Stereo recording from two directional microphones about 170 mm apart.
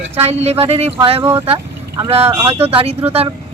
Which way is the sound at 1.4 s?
25° right (ahead or behind).